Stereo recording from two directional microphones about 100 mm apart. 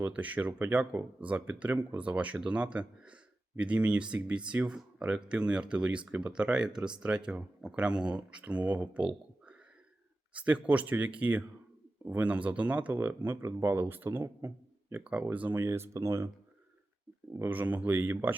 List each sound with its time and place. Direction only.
0.0 s speech: 15° right (ahead or behind); by 16.3 s 30° right (ahead or behind)
17.5 s speech: 15° right (ahead or behind)